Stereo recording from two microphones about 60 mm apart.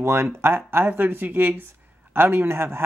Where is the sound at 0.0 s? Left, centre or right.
Right.